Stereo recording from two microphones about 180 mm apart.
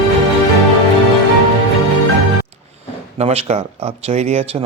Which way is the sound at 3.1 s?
35° right (ahead or behind).